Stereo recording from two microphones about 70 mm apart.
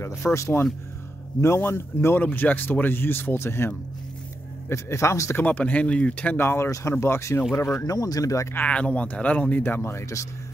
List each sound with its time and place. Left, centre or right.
0.0 s speech: left
5.3 s speech: left
6.4 s speech: left
8.5 s speech: centre
9.6 s speech: left